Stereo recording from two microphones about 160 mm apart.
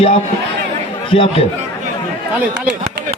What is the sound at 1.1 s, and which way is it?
Speech, 35° left (ahead or behind).